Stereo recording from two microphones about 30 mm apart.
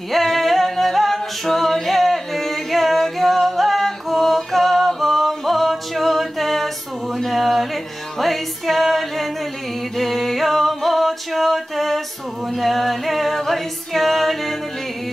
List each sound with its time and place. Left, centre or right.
0.1 s a capella: centre
7.2 s music: centre
9.9 s a sound: centre
12.5 s music: centre